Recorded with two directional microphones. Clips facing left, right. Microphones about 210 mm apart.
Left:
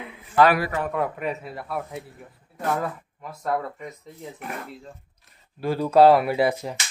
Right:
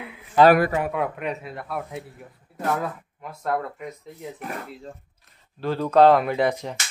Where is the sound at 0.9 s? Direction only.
Centre (ahead or behind).